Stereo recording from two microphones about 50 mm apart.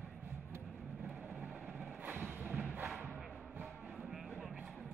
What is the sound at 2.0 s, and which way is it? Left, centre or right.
Thump, right.